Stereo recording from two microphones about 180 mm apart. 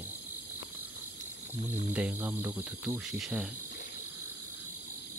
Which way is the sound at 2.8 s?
5° right (ahead or behind).